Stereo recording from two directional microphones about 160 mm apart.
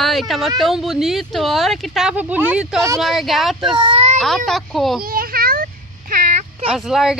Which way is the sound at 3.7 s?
35° right (ahead or behind).